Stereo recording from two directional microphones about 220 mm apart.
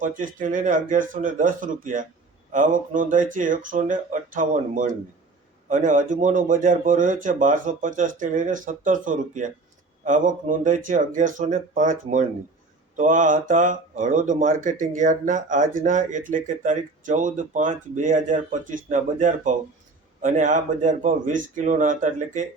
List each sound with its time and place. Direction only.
0.0 s speech: 35° right (ahead or behind)